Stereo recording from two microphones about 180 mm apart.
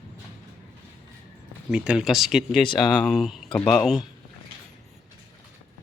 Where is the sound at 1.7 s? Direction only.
5° right (ahead or behind).